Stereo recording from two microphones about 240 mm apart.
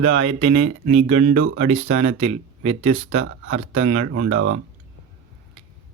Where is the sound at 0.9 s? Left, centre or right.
Right.